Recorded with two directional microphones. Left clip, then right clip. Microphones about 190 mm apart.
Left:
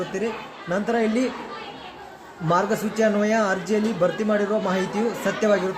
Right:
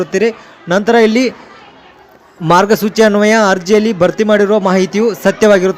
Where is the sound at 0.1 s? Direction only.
45° right (ahead or behind).